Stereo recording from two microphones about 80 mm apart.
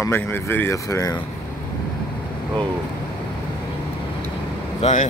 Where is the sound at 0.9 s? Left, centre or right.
Left.